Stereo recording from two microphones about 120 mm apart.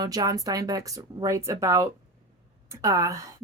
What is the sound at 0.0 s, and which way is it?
Speech, 30° right (ahead or behind).